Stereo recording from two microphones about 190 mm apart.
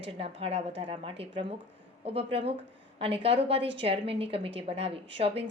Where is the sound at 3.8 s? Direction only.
30° right (ahead or behind).